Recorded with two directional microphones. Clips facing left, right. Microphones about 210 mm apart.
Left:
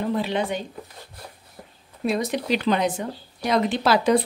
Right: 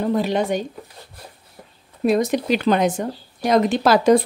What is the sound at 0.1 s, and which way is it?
Speech, 45° right (ahead or behind).